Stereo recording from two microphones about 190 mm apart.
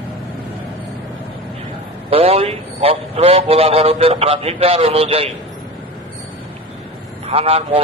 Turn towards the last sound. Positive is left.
turn(degrees=-30)  # may be behind; listen again after turning